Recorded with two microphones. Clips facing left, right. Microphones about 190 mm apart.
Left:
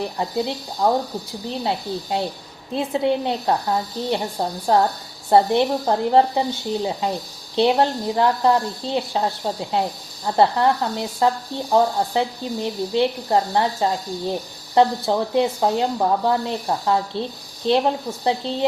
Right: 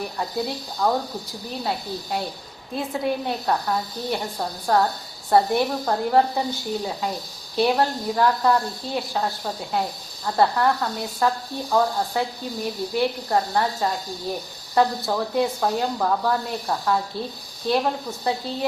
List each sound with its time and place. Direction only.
0.2 s speech: 20° left (ahead or behind)